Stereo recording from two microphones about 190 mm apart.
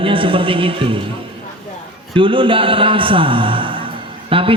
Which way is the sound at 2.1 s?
25° right (ahead or behind).